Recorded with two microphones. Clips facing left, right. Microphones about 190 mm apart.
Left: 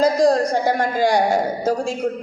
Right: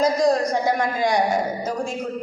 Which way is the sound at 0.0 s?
30° left (ahead or behind).